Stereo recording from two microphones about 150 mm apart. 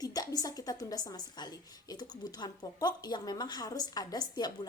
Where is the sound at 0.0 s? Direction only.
25° left (ahead or behind).